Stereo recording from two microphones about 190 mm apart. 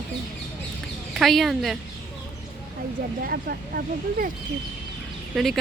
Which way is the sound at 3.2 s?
55° right (ahead or behind).